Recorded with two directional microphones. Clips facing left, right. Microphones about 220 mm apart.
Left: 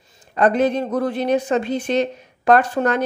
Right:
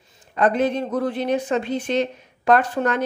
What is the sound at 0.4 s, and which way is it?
Speech, 40° left (ahead or behind).